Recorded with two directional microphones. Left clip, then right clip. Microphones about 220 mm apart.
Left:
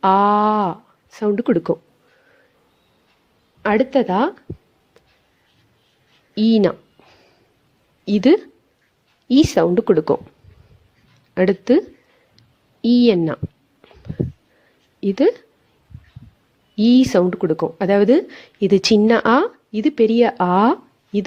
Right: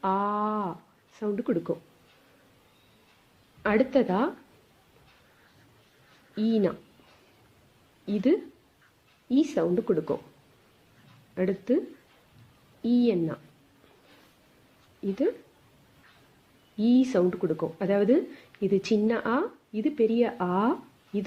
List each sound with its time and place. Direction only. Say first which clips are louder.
0.0 s a sound: left 13 dB; 40° left (ahead or behind)
3.6 s speech: left 7 dB; 35° left (ahead or behind)
6.3 s speech: left 10 dB; 40° left (ahead or behind)
8.0 s speech: left 11 dB; 40° left (ahead or behind)
11.3 s speech: left 11 dB; 40° left (ahead or behind)
12.8 s speech: left 10 dB; 40° left (ahead or behind)
15.0 s speech: left 11 dB; 40° left (ahead or behind)
16.7 s speech: left 9 dB; 40° left (ahead or behind)